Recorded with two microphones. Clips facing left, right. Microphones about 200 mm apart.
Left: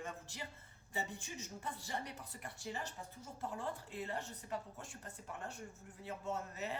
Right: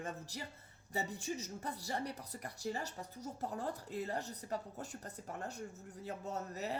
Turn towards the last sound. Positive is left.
turn(degrees=-40)  # may be behind; listen again after turning